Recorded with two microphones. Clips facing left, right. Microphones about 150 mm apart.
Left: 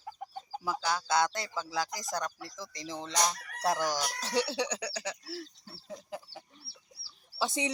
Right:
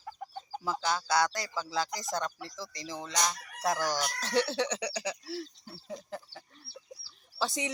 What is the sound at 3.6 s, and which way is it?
Crowing, 30° left (ahead or behind).